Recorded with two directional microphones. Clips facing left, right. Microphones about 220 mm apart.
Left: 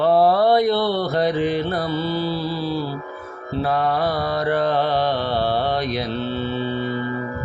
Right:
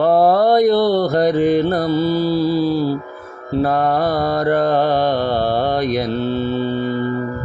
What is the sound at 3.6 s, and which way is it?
Mantra, 45° right (ahead or behind).